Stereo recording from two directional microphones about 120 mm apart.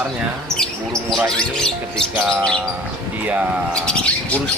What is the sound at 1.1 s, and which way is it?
Speech, 5° left (ahead or behind).